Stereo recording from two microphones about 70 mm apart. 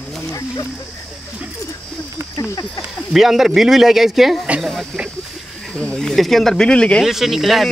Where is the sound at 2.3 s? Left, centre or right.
Left.